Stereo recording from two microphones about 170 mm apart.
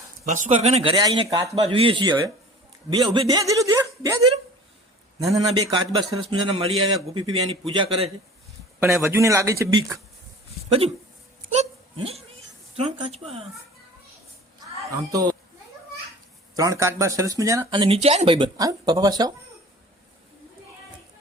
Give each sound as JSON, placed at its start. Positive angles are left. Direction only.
{"t": 0.3, "sound": "a man's voice", "side_deg": -45}
{"t": 5.5, "sound": "a man's voice", "side_deg": -25}
{"t": 8.8, "sound": "a man's voice", "side_deg": -5}
{"t": 9.0, "sound": "speech", "side_deg": -15}
{"t": 10.7, "sound": "a man's voice", "side_deg": -35}
{"t": 11.5, "sound": "hiccup", "side_deg": -40}
{"t": 12.7, "sound": "a man's voice", "side_deg": -35}
{"t": 14.8, "sound": "speech", "side_deg": -20}
{"t": 16.6, "sound": "speech", "side_deg": -20}